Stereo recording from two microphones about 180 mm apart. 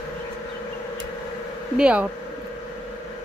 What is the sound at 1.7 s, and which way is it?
Speech, 5° right (ahead or behind).